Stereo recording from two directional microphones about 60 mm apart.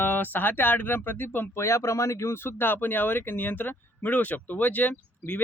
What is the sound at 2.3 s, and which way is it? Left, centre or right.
Speech, left.